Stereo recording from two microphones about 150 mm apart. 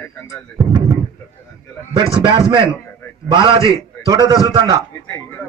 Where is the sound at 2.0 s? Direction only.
35° right (ahead or behind).